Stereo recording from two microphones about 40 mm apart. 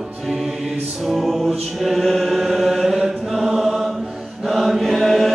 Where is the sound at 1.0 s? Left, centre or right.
Centre.